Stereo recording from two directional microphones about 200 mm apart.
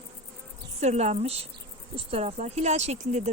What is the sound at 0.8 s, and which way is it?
Speech, 35° right (ahead or behind).